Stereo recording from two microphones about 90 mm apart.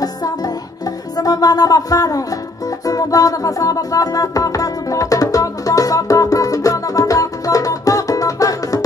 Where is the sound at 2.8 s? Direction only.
40° left (ahead or behind).